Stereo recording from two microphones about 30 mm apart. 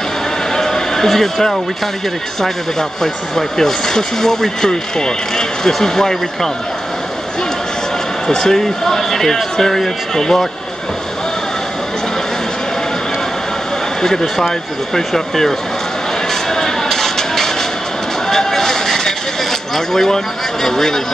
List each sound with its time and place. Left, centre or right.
0.6 s music: centre
3.0 s speech: centre
8.3 s speech: centre
14.0 s speech: centre
16.5 s a sound: centre
19.9 s speech: centre